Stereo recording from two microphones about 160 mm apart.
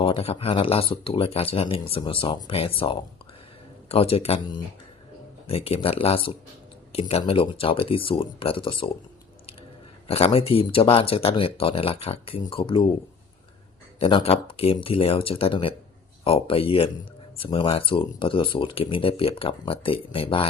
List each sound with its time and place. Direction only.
0.0 s speech: 35° left (ahead or behind)
5.5 s speech: 40° left (ahead or behind)
10.1 s speech: 40° left (ahead or behind)
14.0 s speech: 35° left (ahead or behind)